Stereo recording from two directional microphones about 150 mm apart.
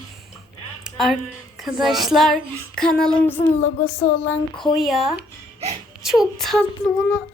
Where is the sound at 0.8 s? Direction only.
Centre (ahead or behind).